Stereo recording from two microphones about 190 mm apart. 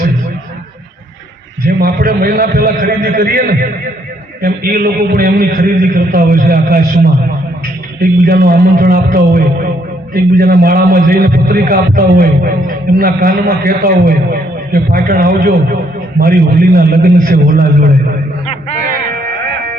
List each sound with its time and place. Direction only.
1.6 s a man's voice: 50° right (ahead or behind)
4.4 s a man's voice: 50° right (ahead or behind)
8.3 s a man's voice: 55° right (ahead or behind)
19.1 s music: 50° right (ahead or behind)